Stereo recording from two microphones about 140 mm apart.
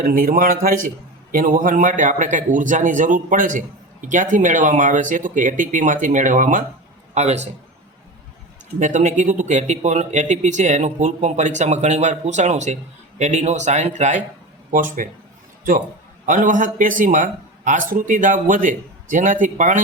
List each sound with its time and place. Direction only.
0.0 s a man's voice: 85° right; by 6.7 s 65° right (ahead or behind)
7.1 s a man's voice: 50° right (ahead or behind)
8.8 s speech: 60° right (ahead or behind)
14.7 s a man's voice: 75° right (ahead or behind)
16.2 s a man's voice: 70° right (ahead or behind)